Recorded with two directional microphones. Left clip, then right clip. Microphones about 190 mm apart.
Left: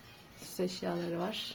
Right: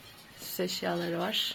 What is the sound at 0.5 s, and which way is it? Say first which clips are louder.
Speech: right 4 dB; 5° right (ahead or behind).